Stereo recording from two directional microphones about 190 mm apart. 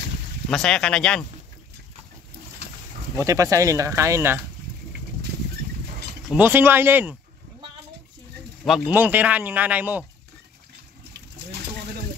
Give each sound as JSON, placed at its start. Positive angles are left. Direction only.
{"t": 0.5, "sound": "speech", "side_deg": 5}
{"t": 3.3, "sound": "speech", "side_deg": -15}
{"t": 6.2, "sound": "speech", "side_deg": -10}
{"t": 8.6, "sound": "speech", "side_deg": -5}